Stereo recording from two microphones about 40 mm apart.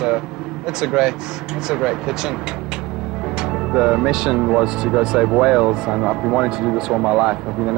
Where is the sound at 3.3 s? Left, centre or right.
Centre.